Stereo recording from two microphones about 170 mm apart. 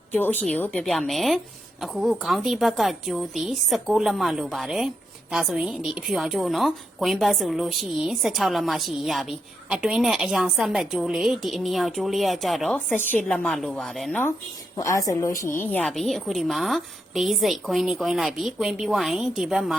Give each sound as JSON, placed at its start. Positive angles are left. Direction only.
{"t": 0.1, "sound": "a woman's voice", "side_deg": 10}
{"t": 14.8, "sound": "a woman's voice", "side_deg": 20}